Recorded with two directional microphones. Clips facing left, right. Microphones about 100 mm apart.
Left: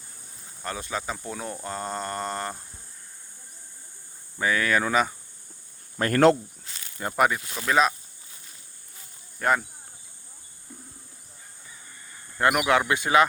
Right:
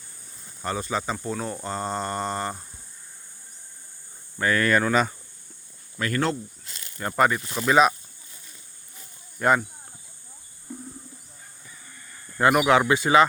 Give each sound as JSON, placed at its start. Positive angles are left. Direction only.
{"t": 0.6, "sound": "speech", "side_deg": 0}
{"t": 4.4, "sound": "speech", "side_deg": 5}
{"t": 6.0, "sound": "speech", "side_deg": 50}
{"t": 7.0, "sound": "speech", "side_deg": 10}
{"t": 9.4, "sound": "speech", "side_deg": 0}
{"t": 12.4, "sound": "speech", "side_deg": 0}